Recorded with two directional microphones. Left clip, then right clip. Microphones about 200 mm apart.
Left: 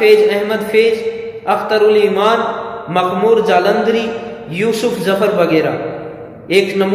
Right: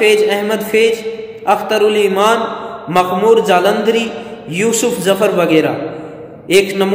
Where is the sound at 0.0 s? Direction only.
55° right (ahead or behind).